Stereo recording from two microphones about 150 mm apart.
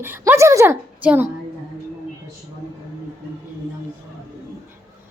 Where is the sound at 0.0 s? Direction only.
15° right (ahead or behind).